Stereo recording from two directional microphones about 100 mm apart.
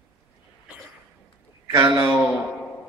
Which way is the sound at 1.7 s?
25° right (ahead or behind).